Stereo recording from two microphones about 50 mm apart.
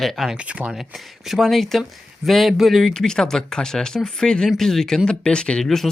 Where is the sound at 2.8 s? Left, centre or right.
Centre.